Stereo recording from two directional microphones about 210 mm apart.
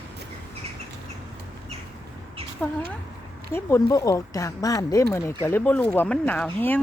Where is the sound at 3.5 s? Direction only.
10° left (ahead or behind).